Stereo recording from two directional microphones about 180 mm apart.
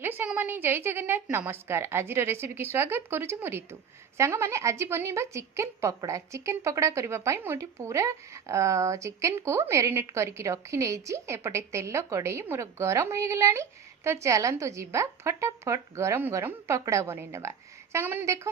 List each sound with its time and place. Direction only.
0.0 s a woman's voice: 10° right (ahead or behind)